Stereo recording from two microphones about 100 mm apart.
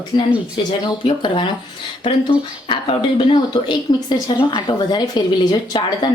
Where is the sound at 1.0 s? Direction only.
55° left (ahead or behind).